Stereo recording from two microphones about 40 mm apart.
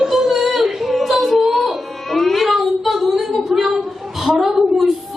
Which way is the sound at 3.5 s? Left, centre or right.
Centre.